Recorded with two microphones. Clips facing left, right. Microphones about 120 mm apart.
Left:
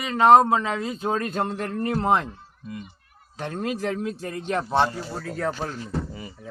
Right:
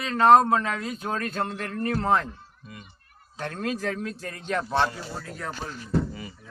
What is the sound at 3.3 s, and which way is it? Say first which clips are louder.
Speech: left 2 dB; 20° left (ahead or behind).